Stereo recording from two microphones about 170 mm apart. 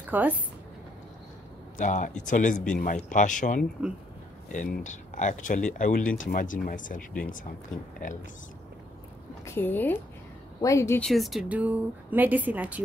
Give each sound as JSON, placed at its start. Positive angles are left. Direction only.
{"t": 0.1, "sound": "speech", "side_deg": -10}
{"t": 1.8, "sound": "speech", "side_deg": 50}
{"t": 2.5, "sound": "speech", "side_deg": 5}
{"t": 3.1, "sound": "speech", "side_deg": 50}
{"t": 9.4, "sound": "speech", "side_deg": 15}
{"t": 11.0, "sound": "speech", "side_deg": 0}